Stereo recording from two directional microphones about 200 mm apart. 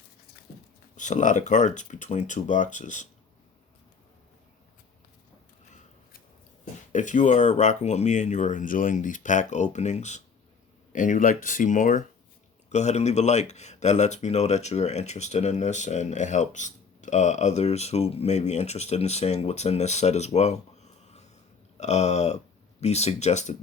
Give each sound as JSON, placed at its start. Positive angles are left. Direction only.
{"t": 0.9, "sound": "speech", "side_deg": 40}
{"t": 6.9, "sound": "speech", "side_deg": 40}